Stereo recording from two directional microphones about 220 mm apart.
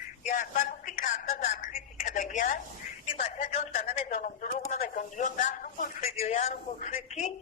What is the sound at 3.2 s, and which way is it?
Speech, 35° left (ahead or behind).